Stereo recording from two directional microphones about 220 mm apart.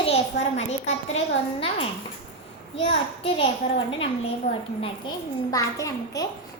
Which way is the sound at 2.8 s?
25° left (ahead or behind).